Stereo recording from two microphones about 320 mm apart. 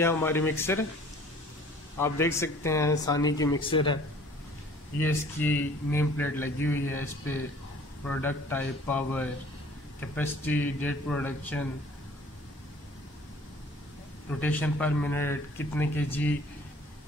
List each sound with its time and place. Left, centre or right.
0.0 s speech: centre
2.0 s speech: centre
14.4 s speech: centre